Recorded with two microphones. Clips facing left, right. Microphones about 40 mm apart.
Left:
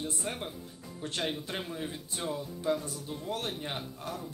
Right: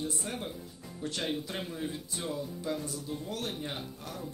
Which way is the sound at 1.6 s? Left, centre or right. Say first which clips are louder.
Right 1 dB; centre.